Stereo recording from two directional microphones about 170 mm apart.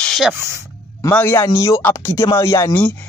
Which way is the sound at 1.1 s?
15° left (ahead or behind).